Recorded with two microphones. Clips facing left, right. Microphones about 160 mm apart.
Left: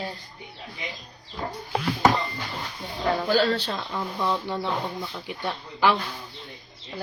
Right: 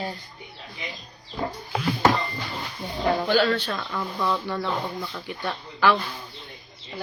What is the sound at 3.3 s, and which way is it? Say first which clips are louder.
Speech: right 1 dB; 35° left (ahead or behind).